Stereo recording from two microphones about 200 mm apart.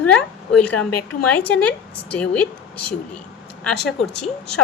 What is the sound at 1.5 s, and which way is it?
A woman's voice, 5° left (ahead or behind).